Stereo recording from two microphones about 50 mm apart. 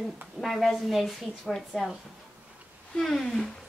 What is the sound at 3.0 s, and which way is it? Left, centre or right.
Speech, centre.